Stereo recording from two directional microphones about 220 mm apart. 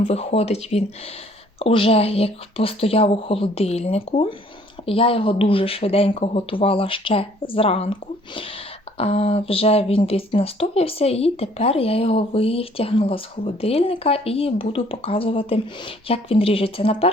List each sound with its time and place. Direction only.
0.0 s speech: 30° left (ahead or behind)
9.0 s speech: 25° left (ahead or behind)